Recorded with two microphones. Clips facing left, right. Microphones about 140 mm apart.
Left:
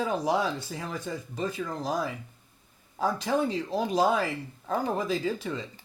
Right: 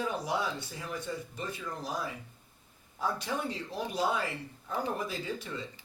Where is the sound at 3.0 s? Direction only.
90° left.